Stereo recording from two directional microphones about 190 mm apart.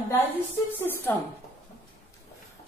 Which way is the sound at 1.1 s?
10° left (ahead or behind).